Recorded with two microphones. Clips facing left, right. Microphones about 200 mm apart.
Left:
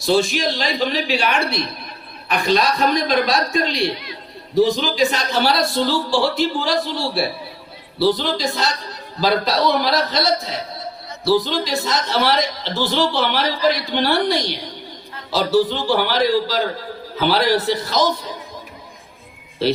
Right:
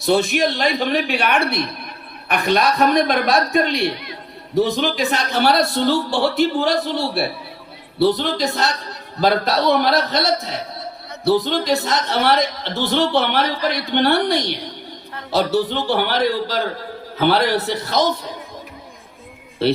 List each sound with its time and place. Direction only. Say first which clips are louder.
0.0 s a man's voice: right 1 dB; 60° right (ahead or behind)
15.1 s a sound: right 2 dB; 60° right (ahead or behind)
16.0 s a man's voice: left 2 dB; 60° right (ahead or behind)